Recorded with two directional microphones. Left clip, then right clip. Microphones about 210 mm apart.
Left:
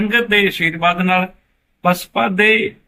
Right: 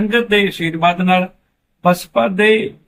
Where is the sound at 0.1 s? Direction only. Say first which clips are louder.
Left 1 dB; 5° left (ahead or behind).